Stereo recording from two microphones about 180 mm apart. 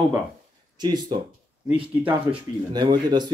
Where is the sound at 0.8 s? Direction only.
25° right (ahead or behind).